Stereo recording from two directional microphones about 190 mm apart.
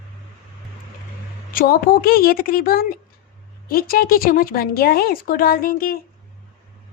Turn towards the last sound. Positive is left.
turn(degrees=50)  # may be behind; listen again after turning